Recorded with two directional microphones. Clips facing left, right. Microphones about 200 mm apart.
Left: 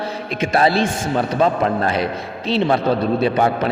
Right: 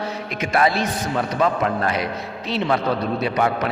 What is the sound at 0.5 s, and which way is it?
A man's voice, 30° left (ahead or behind).